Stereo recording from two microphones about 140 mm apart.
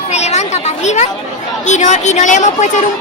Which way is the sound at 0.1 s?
55° left (ahead or behind).